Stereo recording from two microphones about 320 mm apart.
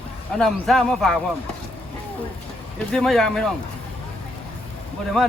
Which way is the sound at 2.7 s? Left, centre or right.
Centre.